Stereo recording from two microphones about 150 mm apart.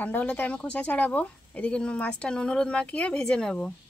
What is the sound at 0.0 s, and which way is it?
Speech, 10° left (ahead or behind).